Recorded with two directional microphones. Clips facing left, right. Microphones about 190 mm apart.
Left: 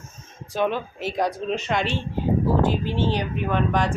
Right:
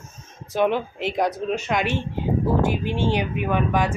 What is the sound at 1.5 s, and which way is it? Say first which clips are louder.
Speech: right 1 dB; 5° right (ahead or behind).